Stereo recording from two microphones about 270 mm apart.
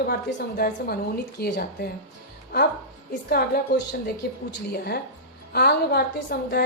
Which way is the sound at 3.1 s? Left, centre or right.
Left.